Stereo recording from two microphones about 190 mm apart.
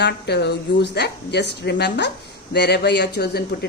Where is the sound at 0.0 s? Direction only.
60° left (ahead or behind).